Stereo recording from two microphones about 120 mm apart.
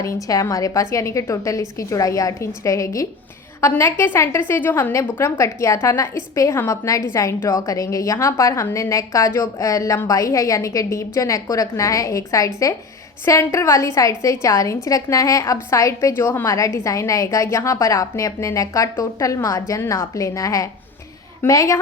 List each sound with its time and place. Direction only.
0.0 s a woman's voice: 25° left (ahead or behind)